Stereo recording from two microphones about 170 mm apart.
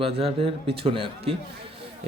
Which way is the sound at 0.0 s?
35° right (ahead or behind).